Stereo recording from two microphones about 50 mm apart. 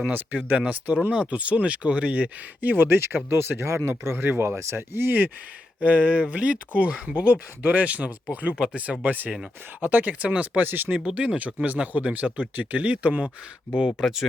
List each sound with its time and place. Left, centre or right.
0.1 s speech: right
0.5 s speech: right
2.6 s speech: right
4.2 s speech: right
4.4 s speech: right
4.8 s speech: right
5.8 s speech: right
8.5 s speech: centre
9.0 s speech: right